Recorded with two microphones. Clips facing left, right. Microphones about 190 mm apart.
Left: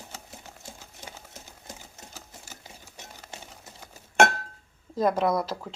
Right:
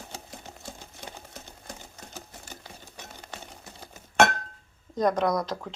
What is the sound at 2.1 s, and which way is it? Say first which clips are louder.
Sewing machine: right 6 dB; 60° right (ahead or behind).